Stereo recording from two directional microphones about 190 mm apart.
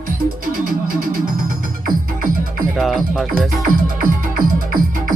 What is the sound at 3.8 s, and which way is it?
Music, 45° right (ahead or behind).